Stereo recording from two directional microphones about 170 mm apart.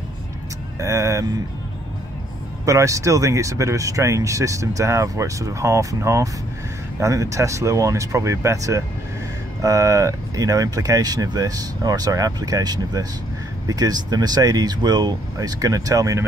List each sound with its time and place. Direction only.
0.7 s speech: 15° right (ahead or behind)
2.6 s speech: 20° right (ahead or behind)